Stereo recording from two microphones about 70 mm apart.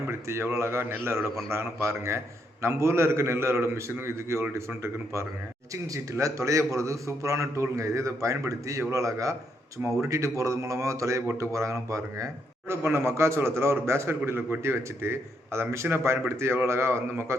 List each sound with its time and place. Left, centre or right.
0.1 s a man's voice: right